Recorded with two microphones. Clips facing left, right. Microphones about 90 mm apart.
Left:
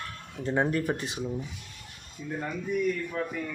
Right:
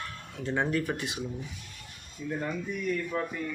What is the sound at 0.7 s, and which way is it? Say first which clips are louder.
Speech: left 1 dB; 30° left (ahead or behind).